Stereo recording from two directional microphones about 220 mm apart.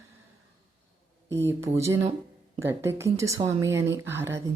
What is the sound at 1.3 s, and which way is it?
Speech, 10° right (ahead or behind).